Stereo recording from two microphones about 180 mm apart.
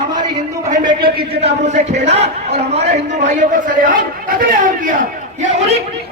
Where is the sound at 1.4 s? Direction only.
40° right (ahead or behind).